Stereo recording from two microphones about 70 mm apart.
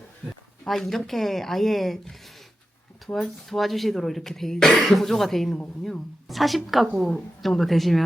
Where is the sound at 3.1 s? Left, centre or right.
Centre.